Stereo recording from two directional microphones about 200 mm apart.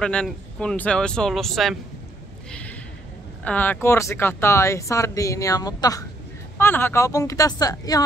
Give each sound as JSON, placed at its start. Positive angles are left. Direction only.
{"t": 0.0, "sound": "speech", "side_deg": 5}
{"t": 3.4, "sound": "speech", "side_deg": 5}